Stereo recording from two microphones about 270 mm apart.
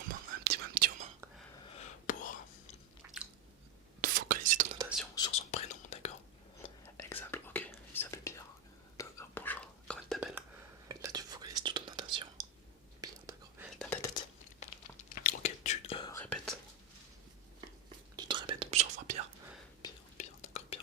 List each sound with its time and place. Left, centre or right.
0.1 s whispering: right
2.1 s whispering: left
4.0 s whispering: right
5.1 s whispering: centre
6.9 s whispering: centre
10.8 s whispering: centre
13.7 s whispering: centre
14.6 s whispering: left
16.2 s whispering: centre
18.2 s whispering: centre
20.1 s whispering: left